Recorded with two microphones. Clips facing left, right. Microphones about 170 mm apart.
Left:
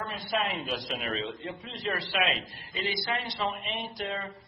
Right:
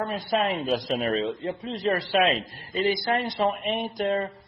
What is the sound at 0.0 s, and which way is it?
A man's voice, 45° right (ahead or behind).